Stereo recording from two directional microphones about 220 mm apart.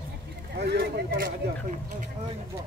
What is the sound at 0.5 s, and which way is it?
Speech, 45° right (ahead or behind).